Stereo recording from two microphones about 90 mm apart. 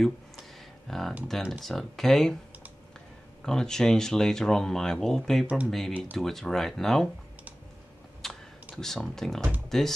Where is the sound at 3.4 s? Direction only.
5° left (ahead or behind).